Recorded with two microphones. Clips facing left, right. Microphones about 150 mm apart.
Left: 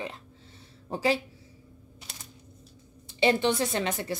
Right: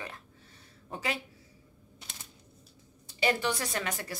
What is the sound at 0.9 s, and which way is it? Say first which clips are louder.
Speech: left 9 dB; 30° left (ahead or behind).